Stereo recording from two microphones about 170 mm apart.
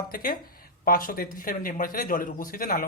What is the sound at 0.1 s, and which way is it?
Speech, 55° left (ahead or behind).